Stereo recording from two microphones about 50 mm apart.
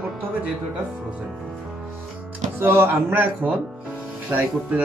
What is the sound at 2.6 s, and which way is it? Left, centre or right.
Speech, right.